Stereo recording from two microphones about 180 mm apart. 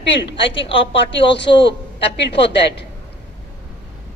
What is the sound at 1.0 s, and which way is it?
A woman's voice, 75° left (ahead or behind).